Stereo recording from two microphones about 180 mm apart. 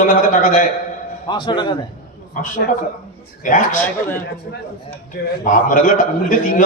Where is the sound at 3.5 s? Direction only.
50° left (ahead or behind).